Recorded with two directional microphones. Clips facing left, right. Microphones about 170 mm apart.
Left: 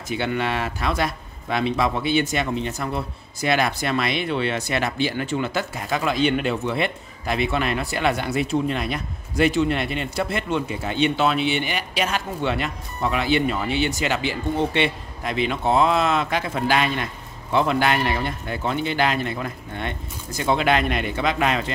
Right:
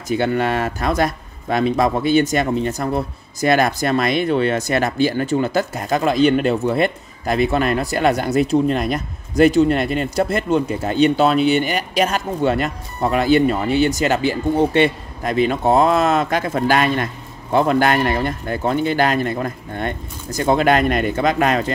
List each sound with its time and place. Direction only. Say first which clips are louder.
0.1 s speech: right 6 dB; 45° right (ahead or behind)